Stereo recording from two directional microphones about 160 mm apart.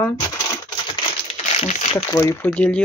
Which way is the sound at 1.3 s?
45° left (ahead or behind).